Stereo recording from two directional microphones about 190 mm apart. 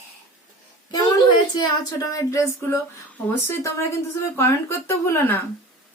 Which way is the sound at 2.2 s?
15° left (ahead or behind).